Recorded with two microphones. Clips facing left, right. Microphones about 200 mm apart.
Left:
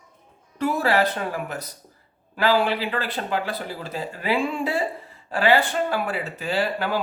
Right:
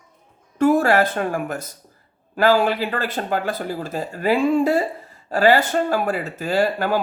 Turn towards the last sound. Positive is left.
turn(degrees=-45)  # may be behind; listen again after turning